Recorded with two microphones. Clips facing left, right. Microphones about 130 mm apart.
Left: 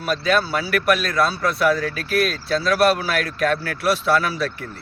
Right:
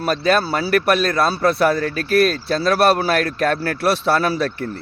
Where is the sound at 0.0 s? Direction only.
35° right (ahead or behind).